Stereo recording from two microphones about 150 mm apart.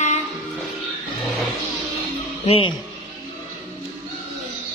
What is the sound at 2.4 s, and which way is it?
Speech, 40° left (ahead or behind).